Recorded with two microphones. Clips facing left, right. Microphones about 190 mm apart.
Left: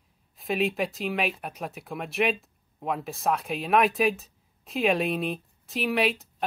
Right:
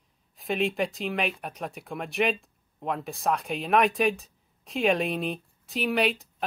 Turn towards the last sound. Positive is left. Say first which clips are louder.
# even
turn(degrees=0)  # may be behind; listen again after turning